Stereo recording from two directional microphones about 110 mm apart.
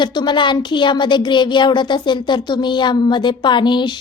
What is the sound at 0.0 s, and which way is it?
A woman's voice, 45° left (ahead or behind).